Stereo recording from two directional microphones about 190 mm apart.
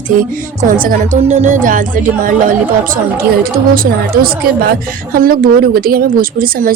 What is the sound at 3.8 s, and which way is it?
A woman's voice, 50° right (ahead or behind).